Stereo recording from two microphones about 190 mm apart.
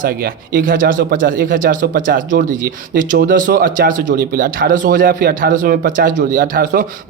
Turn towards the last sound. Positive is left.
turn(degrees=-45)  # may be behind; listen again after turning